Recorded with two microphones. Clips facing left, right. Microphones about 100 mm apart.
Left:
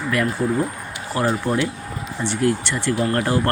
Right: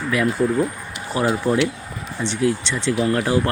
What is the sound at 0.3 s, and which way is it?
Speech, 5° left (ahead or behind).